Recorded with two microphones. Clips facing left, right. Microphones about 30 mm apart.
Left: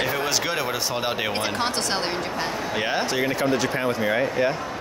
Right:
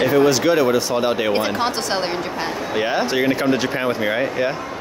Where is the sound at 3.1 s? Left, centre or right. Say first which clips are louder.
Right 5 dB; centre.